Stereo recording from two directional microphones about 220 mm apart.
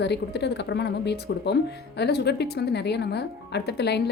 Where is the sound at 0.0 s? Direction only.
50° left (ahead or behind).